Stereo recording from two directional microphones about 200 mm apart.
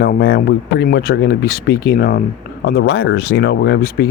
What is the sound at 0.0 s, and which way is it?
Speech, 50° left (ahead or behind).